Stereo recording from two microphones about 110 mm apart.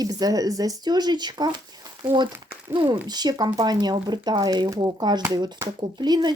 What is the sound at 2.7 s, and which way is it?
Speech, 45° right (ahead or behind).